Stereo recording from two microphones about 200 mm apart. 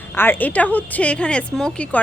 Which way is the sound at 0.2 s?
10° left (ahead or behind).